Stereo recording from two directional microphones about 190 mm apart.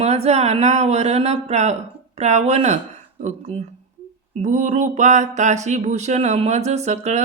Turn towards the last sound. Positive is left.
turn(degrees=-35)  # may be behind; listen again after turning